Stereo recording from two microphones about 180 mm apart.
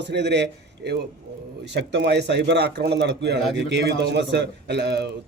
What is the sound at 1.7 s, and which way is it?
A man's voice, 75° right (ahead or behind).